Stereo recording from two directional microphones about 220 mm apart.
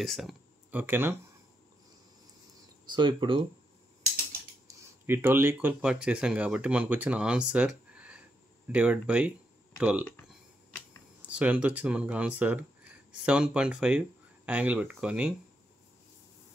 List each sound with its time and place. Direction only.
0.0 s speech: centre (ahead or behind)
2.9 s speech: 20° right (ahead or behind)
4.6 s speech: 10° right (ahead or behind); by 10.3 s 5° left (ahead or behind)
11.2 s speech: 5° right (ahead or behind)